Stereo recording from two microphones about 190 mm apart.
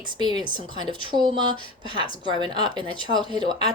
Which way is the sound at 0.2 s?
25° right (ahead or behind).